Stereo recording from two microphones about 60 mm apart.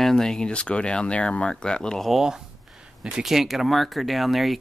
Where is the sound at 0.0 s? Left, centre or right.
Centre.